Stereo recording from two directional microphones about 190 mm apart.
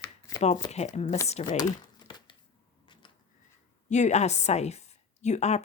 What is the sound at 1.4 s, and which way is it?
Speech, 35° left (ahead or behind).